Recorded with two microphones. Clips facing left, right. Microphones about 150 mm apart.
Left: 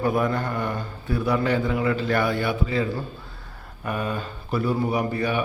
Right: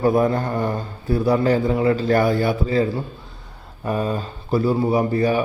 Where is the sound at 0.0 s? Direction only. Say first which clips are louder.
Right 5 dB; 35° right (ahead or behind).